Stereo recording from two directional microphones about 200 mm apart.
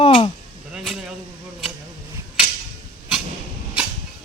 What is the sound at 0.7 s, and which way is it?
Speech, centre (ahead or behind).